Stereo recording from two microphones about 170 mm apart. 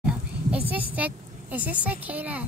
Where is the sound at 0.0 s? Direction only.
10° right (ahead or behind).